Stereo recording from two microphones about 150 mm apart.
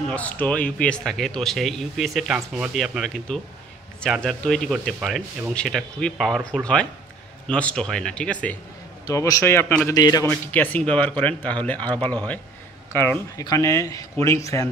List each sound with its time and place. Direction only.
0.1 s speech: 10° left (ahead or behind)
9.0 s speech: 20° left (ahead or behind)
9.9 s speech: 25° left (ahead or behind)
10.2 s speech: 10° left (ahead or behind)